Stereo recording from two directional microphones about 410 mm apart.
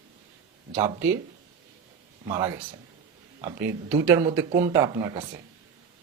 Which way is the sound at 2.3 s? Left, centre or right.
Centre.